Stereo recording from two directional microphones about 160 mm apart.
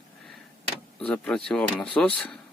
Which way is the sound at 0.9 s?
5° left (ahead or behind).